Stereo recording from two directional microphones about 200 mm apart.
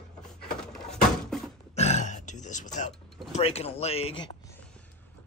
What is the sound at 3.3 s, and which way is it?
Speech, 30° left (ahead or behind).